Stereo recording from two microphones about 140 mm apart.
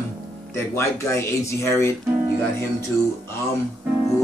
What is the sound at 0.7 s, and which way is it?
Speech, 20° left (ahead or behind).